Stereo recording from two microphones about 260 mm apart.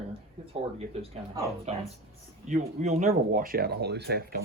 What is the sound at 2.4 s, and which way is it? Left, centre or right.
Speech, right.